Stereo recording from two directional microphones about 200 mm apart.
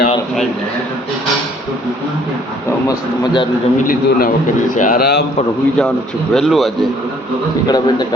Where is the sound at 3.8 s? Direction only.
45° left (ahead or behind).